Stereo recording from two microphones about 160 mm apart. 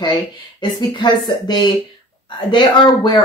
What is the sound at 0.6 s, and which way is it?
Speech, 25° left (ahead or behind).